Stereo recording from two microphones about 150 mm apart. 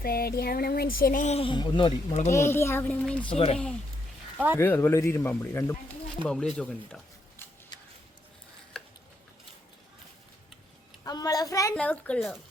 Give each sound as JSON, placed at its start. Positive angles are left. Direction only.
{"t": 0.0, "sound": "a sound", "side_deg": 90}
{"t": 1.4, "sound": "a man's voice", "side_deg": 35}
{"t": 2.3, "sound": "speech", "side_deg": 15}
{"t": 3.2, "sound": "a man's voice", "side_deg": 40}
{"t": 4.5, "sound": "speech", "side_deg": 15}
{"t": 6.2, "sound": "speech", "side_deg": 5}
{"t": 7.7, "sound": "a sound", "side_deg": 30}
{"t": 11.0, "sound": "a child's voice", "side_deg": 25}
{"t": 11.7, "sound": "speech", "side_deg": 10}